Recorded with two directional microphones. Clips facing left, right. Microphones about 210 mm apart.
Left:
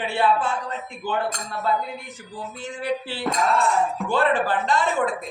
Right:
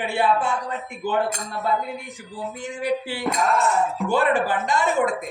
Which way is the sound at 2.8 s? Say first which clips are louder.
Right 2 dB; 15° right (ahead or behind).